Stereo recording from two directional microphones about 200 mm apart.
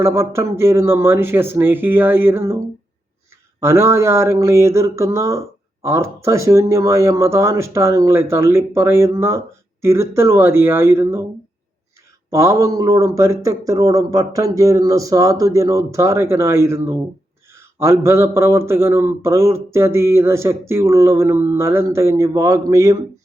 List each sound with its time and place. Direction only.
0.0 s speech: 15° right (ahead or behind)
3.6 s speech: 15° right (ahead or behind)
12.3 s speech: 15° right (ahead or behind)